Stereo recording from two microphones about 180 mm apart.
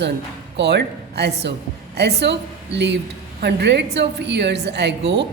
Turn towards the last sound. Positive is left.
turn(degrees=-70)  # may be behind; listen again after turning